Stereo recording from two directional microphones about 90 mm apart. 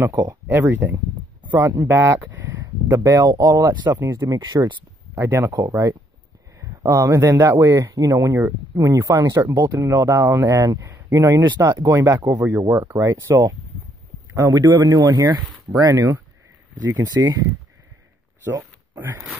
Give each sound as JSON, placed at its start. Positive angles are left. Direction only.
{"t": 0.1, "sound": "speech", "side_deg": -45}
{"t": 0.5, "sound": "speech", "side_deg": -25}
{"t": 2.6, "sound": "speech", "side_deg": -40}
{"t": 4.1, "sound": "speech", "side_deg": -35}
{"t": 4.4, "sound": "speech", "side_deg": -55}
{"t": 18.9, "sound": "speech", "side_deg": -20}